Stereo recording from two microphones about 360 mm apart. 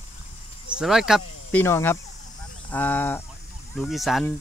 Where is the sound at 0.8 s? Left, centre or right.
Centre.